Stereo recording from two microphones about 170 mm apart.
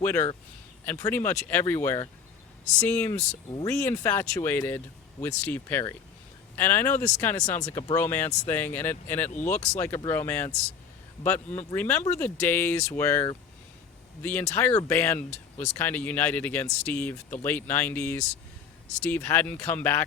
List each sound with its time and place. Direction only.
0.0 s a man's voice: 10° left (ahead or behind)
3.5 s speech: 20° left (ahead or behind)
9.5 s speech: 45° left (ahead or behind)
10.1 s speech: 10° left (ahead or behind)